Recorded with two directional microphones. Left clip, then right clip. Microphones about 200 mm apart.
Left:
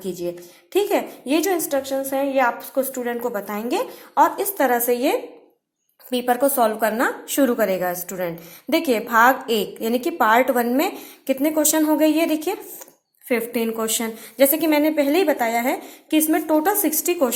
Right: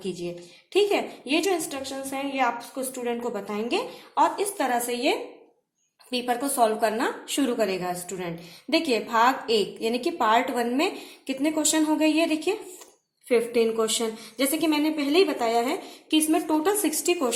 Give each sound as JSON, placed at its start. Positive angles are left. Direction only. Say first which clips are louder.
{"t": 0.0, "sound": "a woman's voice", "louder": "left 5 dB", "side_deg": 30}